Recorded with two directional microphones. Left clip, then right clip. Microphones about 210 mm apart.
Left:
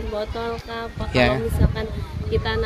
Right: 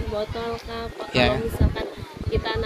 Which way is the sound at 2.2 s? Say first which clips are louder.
Left 2 dB; centre (ahead or behind).